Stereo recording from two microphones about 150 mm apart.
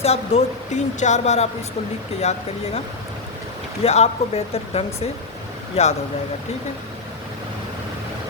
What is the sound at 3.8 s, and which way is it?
A woman's voice, 45° left (ahead or behind).